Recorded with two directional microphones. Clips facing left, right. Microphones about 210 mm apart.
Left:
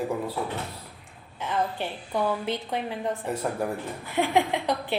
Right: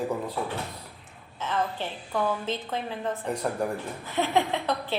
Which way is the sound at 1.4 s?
15° left (ahead or behind).